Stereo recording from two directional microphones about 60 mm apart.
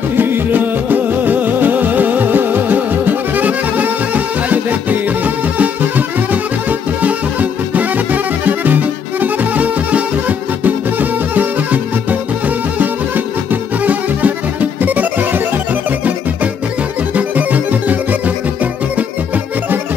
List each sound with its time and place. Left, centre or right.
0.2 s music: right
17.1 s music: right